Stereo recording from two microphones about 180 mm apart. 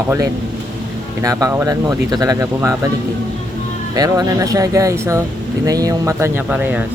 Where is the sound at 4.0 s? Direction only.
20° right (ahead or behind).